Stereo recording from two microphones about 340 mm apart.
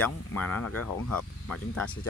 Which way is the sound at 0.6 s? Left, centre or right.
Left.